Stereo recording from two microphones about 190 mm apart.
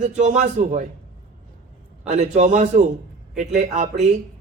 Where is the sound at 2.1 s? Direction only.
40° right (ahead or behind).